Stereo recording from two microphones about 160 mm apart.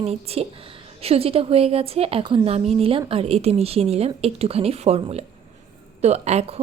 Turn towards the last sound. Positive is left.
turn(degrees=-40)  # may be behind; listen again after turning